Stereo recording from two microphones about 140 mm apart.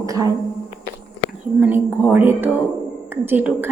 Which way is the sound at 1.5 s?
10° right (ahead or behind).